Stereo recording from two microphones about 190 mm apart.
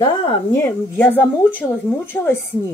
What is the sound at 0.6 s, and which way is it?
Speech, 10° left (ahead or behind).